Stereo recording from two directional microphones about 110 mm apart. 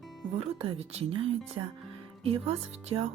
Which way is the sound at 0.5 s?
65° right (ahead or behind).